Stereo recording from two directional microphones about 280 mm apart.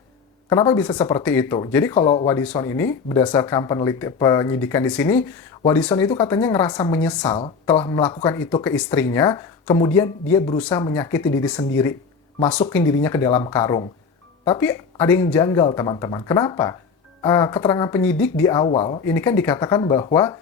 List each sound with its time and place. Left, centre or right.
0.5 s a woman's voice: centre
12.5 s a woman's voice: centre